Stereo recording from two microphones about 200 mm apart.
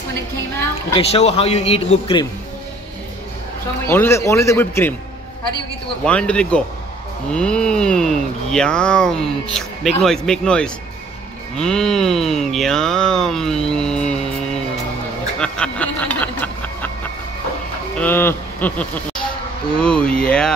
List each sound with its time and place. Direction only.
0.9 s speech: 30° left (ahead or behind)
3.8 s speech: 10° left (ahead or behind)
6.0 s speech: 5° left (ahead or behind)
15.4 s a sound: 5° left (ahead or behind)
17.9 s speech: 10° left (ahead or behind)